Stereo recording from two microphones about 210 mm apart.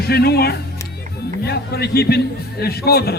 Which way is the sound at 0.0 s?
50° left (ahead or behind).